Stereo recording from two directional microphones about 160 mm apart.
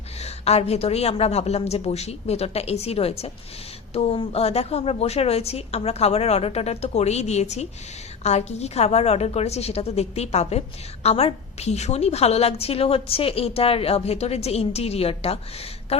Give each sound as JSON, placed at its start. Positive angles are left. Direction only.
{"t": 0.2, "sound": "a woman's voice", "side_deg": 40}